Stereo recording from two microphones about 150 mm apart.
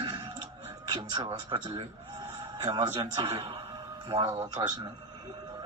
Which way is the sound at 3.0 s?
35° right (ahead or behind).